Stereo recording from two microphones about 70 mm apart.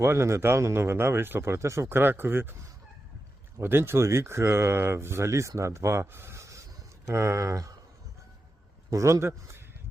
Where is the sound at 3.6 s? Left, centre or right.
Right.